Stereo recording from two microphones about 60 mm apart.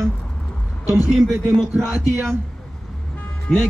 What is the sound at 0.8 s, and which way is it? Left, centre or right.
Speech, left.